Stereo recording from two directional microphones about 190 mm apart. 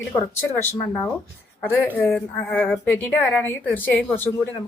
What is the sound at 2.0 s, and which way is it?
A woman's voice, 10° left (ahead or behind).